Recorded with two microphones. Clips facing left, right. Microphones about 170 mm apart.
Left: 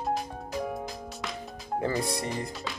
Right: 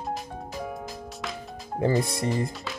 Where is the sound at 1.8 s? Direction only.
25° right (ahead or behind).